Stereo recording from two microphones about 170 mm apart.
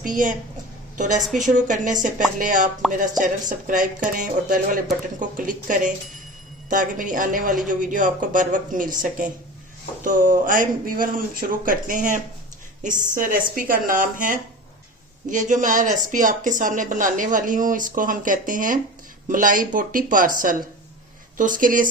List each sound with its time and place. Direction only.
0.0 s a woman's voice: 50° right (ahead or behind)
1.2 s a woman's voice: centre (ahead or behind)
1.5 s speech: 50° right (ahead or behind)
3.7 s speech: 50° right (ahead or behind)